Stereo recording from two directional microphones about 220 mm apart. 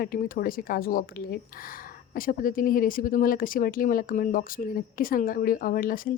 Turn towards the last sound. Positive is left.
turn(degrees=40)  # may be behind; listen again after turning